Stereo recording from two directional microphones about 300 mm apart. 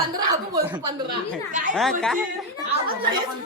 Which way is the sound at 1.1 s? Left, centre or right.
Right.